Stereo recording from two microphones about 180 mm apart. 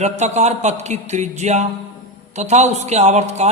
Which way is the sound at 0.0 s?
40° right (ahead or behind).